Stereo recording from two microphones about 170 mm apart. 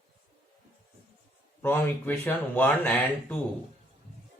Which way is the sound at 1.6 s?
10° left (ahead or behind).